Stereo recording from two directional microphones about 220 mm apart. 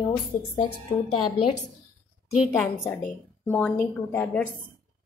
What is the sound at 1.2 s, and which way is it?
Speech, 90° left.